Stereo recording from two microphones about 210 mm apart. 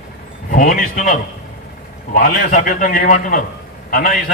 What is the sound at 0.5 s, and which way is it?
A man's voice, 40° left (ahead or behind).